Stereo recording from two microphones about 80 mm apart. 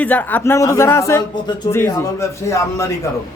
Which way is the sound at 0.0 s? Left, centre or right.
Left.